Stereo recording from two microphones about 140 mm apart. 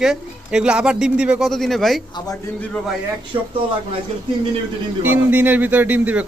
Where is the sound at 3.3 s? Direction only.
40° right (ahead or behind).